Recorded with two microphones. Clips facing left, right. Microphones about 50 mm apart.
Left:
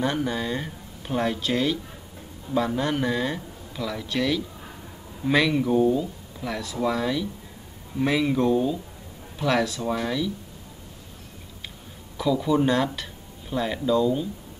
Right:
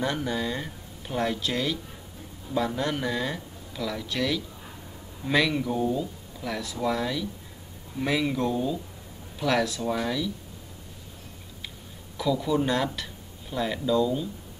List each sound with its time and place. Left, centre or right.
0.0 s speech: centre
6.4 s speech: centre
12.2 s speech: centre